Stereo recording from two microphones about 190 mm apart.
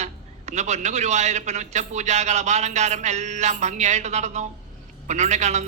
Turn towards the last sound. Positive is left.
turn(degrees=-35)  # may be behind; listen again after turning